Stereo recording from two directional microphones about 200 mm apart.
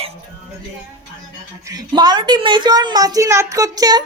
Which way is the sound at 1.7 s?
20° right (ahead or behind).